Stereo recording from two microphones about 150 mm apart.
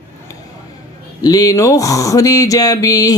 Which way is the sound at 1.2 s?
25° left (ahead or behind).